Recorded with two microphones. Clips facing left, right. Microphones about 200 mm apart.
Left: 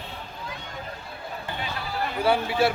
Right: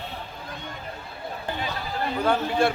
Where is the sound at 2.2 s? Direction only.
5° left (ahead or behind).